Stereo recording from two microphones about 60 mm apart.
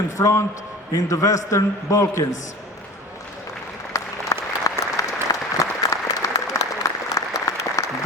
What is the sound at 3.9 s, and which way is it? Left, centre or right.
Applause, left.